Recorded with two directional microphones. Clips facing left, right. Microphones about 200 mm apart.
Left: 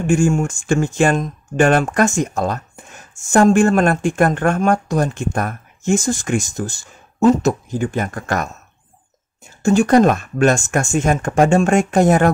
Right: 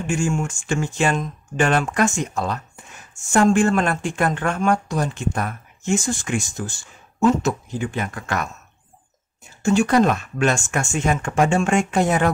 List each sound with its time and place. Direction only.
0.0 s speech: 45° left (ahead or behind)
9.6 s speech: 45° left (ahead or behind)